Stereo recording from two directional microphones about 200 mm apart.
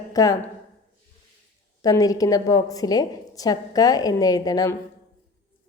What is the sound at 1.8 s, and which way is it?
A woman's voice, 15° left (ahead or behind).